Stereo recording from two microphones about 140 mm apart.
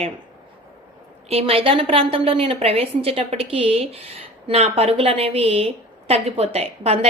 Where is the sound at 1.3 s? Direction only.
45° right (ahead or behind).